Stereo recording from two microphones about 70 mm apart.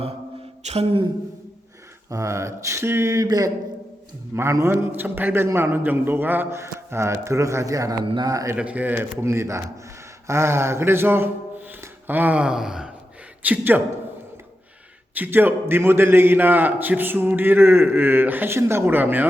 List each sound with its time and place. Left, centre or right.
2.0 s speech: right
3.2 s a sound: right
4.4 s a man's voice: right
6.6 s speech: right
8.5 s a man's voice: centre
9.2 s a man's voice: right
12.4 s a man's voice: centre
13.4 s a man's voice: right
15.1 s a man's voice: right